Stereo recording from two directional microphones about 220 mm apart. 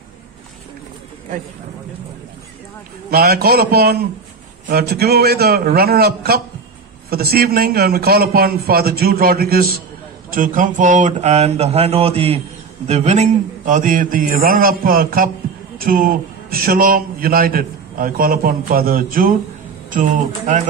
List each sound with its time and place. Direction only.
3.1 s a man's voice: 45° right (ahead or behind)